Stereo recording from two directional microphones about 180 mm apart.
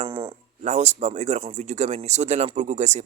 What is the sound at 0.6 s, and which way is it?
Speech, 40° right (ahead or behind).